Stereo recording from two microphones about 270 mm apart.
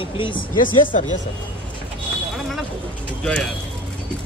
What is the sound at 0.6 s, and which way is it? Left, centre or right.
Speech, left.